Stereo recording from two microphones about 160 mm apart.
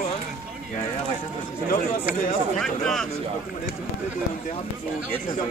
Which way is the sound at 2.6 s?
5° left (ahead or behind).